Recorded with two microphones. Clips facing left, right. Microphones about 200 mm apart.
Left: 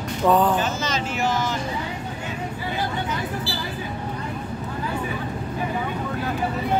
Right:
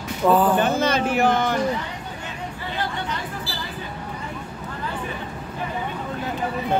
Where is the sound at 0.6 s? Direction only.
60° right (ahead or behind).